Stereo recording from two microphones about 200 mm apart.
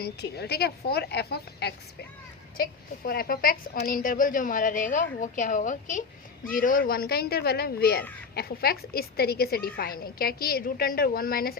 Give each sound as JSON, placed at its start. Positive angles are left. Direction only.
{"t": 0.0, "sound": "a woman's voice", "side_deg": 55}